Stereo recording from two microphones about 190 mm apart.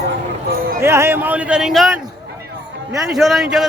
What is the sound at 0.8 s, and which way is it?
Speech, 15° right (ahead or behind).